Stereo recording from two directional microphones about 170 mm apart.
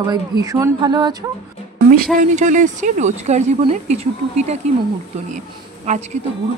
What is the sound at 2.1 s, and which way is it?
Speech, 45° right (ahead or behind).